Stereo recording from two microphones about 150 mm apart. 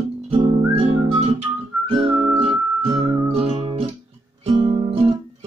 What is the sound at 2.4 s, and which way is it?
Music, 40° right (ahead or behind).